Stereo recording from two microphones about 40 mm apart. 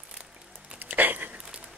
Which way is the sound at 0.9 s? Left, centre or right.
Right.